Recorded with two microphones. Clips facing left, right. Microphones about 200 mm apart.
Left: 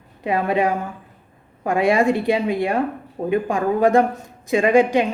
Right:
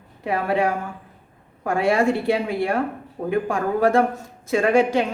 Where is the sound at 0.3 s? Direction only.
20° left (ahead or behind).